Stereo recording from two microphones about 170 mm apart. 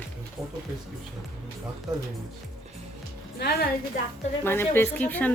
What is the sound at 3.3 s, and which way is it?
Speech, 65° left (ahead or behind).